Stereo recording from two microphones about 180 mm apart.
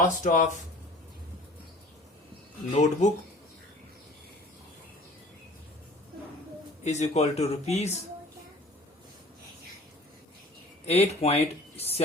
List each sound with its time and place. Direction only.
0.0 s speech: 45° left (ahead or behind)
2.7 s speech: 40° left (ahead or behind)
6.8 s speech: 40° left (ahead or behind)
10.8 s speech: 35° left (ahead or behind)